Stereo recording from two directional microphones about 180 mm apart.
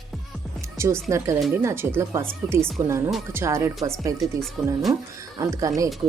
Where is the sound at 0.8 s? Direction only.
15° right (ahead or behind).